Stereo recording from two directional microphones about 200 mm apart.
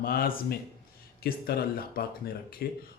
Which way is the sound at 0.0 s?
45° left (ahead or behind).